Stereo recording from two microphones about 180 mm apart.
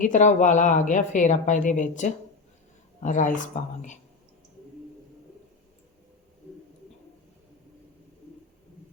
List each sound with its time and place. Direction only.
0.0 s a woman's voice: 45° left (ahead or behind)